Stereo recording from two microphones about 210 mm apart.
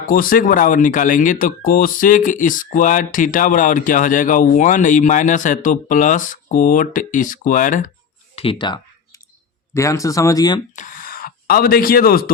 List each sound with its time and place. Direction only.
0.0 s speech: 40° left (ahead or behind)
8.4 s typing: 25° left (ahead or behind)
9.7 s speech: 15° left (ahead or behind)
10.8 s speech: 40° left (ahead or behind)